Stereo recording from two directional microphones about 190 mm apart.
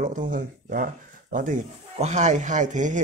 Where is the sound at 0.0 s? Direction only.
40° right (ahead or behind).